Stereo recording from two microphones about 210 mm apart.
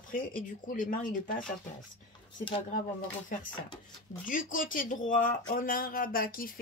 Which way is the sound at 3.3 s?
40° left (ahead or behind).